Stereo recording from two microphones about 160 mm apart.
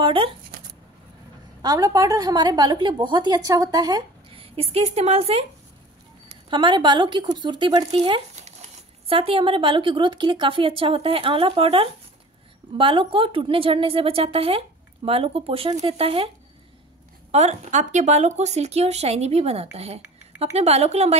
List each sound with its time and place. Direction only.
0.0 s speech: 35° right (ahead or behind)
1.6 s a woman's voice: 20° right (ahead or behind); by 5.4 s 40° right (ahead or behind)
6.5 s speech: 30° right (ahead or behind)
17.3 s speech: 45° right (ahead or behind)
19.8 s a sound: 40° right (ahead or behind)
20.5 s speech: 40° right (ahead or behind)